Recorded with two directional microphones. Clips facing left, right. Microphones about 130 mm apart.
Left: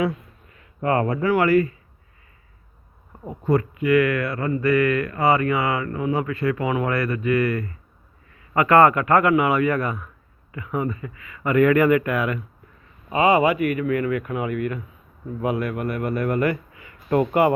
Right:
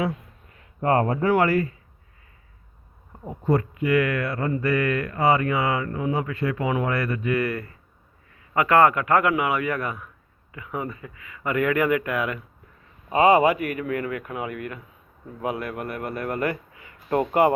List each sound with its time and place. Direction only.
0.9 s speech: 35° right (ahead or behind)
3.6 s speech: 25° right (ahead or behind)
8.5 s speech: 10° right (ahead or behind)
13.1 s a man's voice: 40° right (ahead or behind)